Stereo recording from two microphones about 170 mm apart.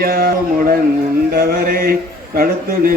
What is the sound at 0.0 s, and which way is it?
A man's voice, 60° right (ahead or behind).